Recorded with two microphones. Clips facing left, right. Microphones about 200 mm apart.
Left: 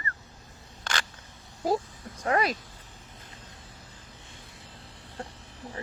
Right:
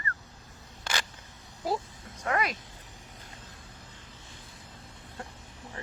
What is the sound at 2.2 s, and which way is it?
Speech, 30° left (ahead or behind).